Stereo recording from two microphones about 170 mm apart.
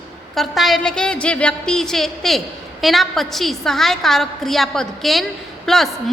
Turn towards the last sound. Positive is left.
turn(degrees=0)  # may be behind; listen again after turning